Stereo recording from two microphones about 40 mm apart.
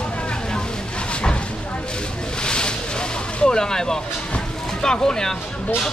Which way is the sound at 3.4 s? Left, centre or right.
Centre.